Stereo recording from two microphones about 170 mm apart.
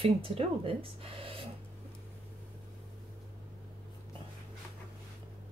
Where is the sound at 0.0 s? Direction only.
35° right (ahead or behind).